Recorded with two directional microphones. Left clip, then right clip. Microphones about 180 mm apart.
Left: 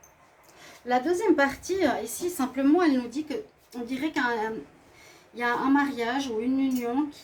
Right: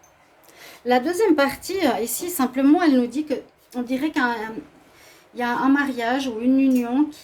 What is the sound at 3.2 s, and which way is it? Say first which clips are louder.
A woman's voice: right 7 dB; 45° right (ahead or behind).